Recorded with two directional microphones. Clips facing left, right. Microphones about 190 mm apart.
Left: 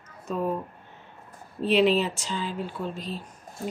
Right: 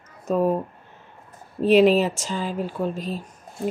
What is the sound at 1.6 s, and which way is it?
Speech, 45° right (ahead or behind).